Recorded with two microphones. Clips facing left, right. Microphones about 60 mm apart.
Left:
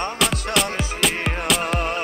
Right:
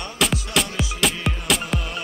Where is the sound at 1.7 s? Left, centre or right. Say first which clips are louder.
Left 4 dB; left.